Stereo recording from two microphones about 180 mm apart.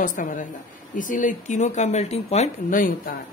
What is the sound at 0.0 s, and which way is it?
Speech, 45° left (ahead or behind).